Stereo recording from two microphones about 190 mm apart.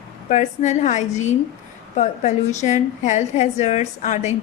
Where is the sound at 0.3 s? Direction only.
40° left (ahead or behind).